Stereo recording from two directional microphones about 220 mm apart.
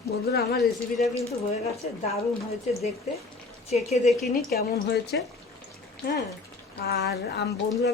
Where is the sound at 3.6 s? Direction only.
30° left (ahead or behind).